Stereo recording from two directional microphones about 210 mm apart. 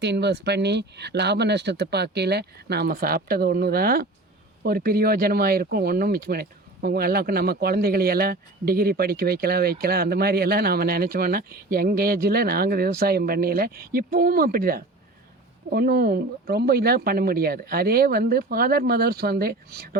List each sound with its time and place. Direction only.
0.0 s speech: 55° right (ahead or behind)